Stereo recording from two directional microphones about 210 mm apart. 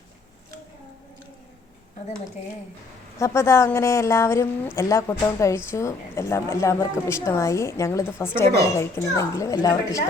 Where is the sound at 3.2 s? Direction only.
15° left (ahead or behind).